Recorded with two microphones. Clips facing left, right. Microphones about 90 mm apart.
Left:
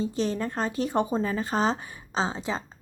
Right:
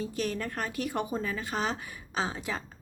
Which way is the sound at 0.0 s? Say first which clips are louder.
Left 5 dB; 25° left (ahead or behind).